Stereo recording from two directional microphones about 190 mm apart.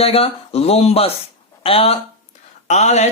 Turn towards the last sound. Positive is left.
turn(degrees=35)  # may be behind; listen again after turning